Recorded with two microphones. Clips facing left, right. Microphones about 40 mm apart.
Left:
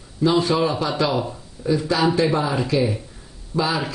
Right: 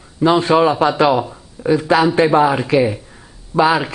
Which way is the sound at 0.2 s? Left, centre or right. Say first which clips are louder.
Right 6 dB; right.